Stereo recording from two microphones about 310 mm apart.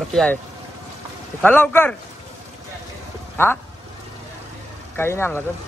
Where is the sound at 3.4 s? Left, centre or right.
Centre.